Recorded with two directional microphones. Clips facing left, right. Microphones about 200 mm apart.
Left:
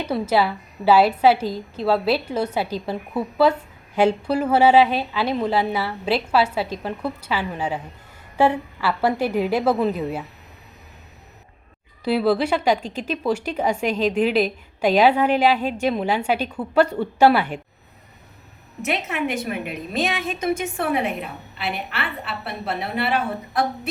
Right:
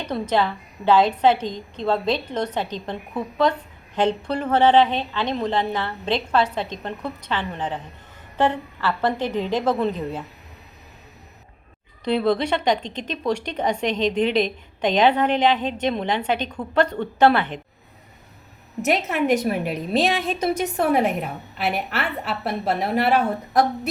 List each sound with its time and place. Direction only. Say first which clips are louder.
0.0 s a woman's voice: left 2 dB; 5° left (ahead or behind)
12.0 s a woman's voice: left 1 dB; 5° left (ahead or behind)
18.8 s a woman's voice: right 3 dB; 40° right (ahead or behind)